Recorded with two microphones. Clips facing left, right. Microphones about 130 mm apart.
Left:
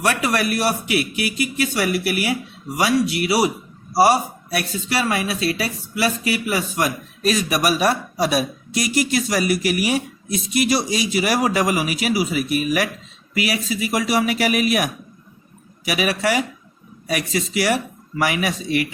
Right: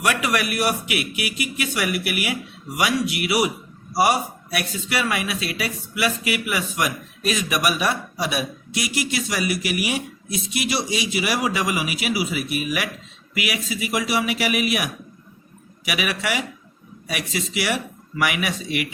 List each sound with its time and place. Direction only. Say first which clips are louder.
0.0 s speech: left 2 dB; 35° left (ahead or behind)